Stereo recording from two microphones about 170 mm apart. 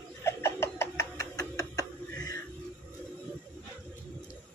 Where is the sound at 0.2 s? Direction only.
15° left (ahead or behind).